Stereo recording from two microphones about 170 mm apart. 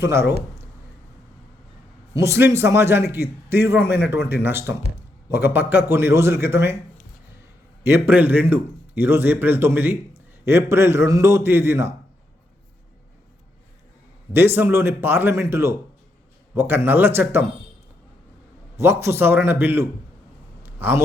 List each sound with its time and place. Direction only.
0.0 s a man's voice: 15° right (ahead or behind)
2.1 s a man's voice: 15° right (ahead or behind)
7.9 s a man's voice: 10° right (ahead or behind)
14.3 s a man's voice: 15° right (ahead or behind)
18.8 s a man's voice: 15° right (ahead or behind)
20.6 s a sound: 15° right (ahead or behind)